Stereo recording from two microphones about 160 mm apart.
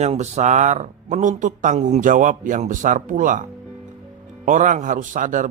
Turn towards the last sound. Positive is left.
turn(degrees=-55)  # may be behind; listen again after turning